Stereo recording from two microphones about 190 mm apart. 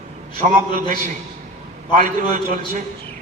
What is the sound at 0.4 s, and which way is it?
A man's voice, 40° right (ahead or behind).